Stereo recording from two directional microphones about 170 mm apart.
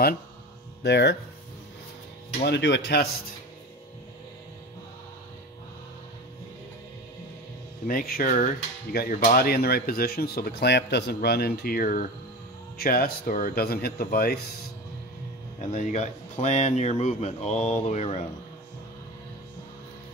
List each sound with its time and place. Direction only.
0.8 s speech: 80° left
2.4 s speech: 90° left
7.8 s speech: 60° left (ahead or behind)
15.6 s speech: 45° left (ahead or behind)